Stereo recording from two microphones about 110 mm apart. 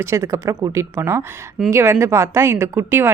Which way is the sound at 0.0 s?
25° right (ahead or behind).